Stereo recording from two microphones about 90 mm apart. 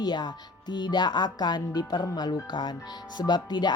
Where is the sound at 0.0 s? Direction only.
50° left (ahead or behind).